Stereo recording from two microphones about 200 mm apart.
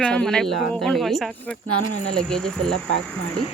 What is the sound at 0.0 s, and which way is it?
Speech, 5° left (ahead or behind).